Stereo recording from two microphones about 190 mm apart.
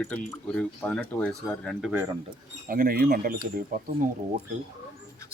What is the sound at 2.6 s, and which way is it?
Speech, 50° right (ahead or behind).